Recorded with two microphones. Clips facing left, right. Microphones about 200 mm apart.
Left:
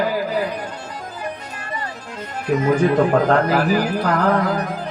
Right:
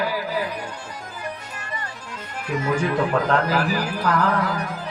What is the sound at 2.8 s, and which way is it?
A man's voice, 55° left (ahead or behind).